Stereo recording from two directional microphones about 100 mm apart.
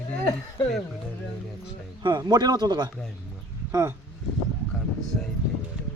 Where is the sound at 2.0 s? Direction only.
45° right (ahead or behind).